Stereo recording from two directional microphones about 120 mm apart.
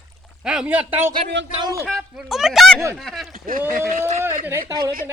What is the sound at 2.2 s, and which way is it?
A man's voice, 5° right (ahead or behind).